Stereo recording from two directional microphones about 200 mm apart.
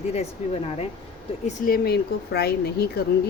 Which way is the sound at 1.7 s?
50° left (ahead or behind).